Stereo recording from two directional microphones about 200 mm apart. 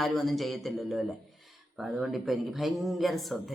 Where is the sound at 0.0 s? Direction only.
Centre (ahead or behind).